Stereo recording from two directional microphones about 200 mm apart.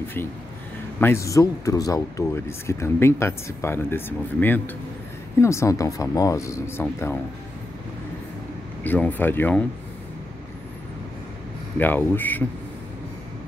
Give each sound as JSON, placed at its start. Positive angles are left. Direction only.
{"t": 0.9, "sound": "speech", "side_deg": 10}
{"t": 8.8, "sound": "speech", "side_deg": 10}
{"t": 11.8, "sound": "speech", "side_deg": 10}